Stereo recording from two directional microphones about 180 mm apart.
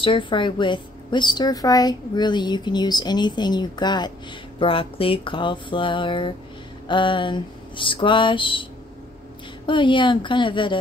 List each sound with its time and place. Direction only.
0.0 s a woman's voice: 25° left (ahead or behind)
9.7 s a woman's voice: 25° left (ahead or behind)